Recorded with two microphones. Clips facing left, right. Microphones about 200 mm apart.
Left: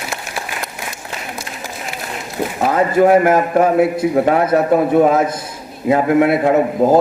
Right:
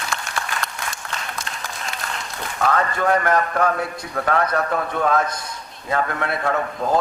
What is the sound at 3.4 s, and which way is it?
A man's voice, 20° left (ahead or behind).